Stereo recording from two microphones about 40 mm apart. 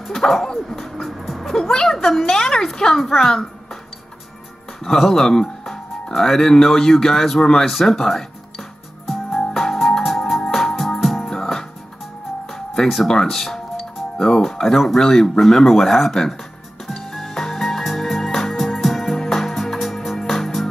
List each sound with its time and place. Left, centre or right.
0.3 s a woman's voice: centre
4.8 s a woman's voice: centre
9.0 s music: centre
12.8 s speech: centre
13.1 s a woman's voice: centre
13.7 s music: centre
15.0 s a woman's voice: centre
16.8 s music: centre